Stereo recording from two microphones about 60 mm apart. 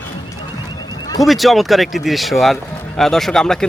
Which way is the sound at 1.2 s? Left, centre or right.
Centre.